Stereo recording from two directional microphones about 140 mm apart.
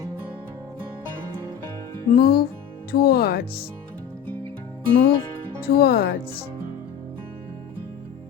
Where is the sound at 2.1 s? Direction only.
90° left.